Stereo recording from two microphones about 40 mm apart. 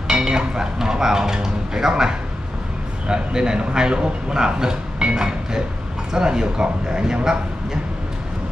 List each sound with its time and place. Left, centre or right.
0.1 s a man's voice: centre